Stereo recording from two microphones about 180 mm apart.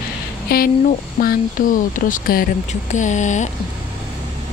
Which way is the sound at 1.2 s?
50° left (ahead or behind).